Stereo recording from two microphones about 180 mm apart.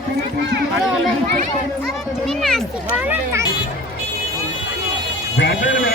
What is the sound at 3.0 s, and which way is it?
Speech, 10° right (ahead or behind).